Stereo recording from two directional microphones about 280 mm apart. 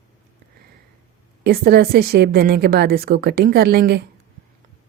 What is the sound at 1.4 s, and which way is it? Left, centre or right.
Speech, right.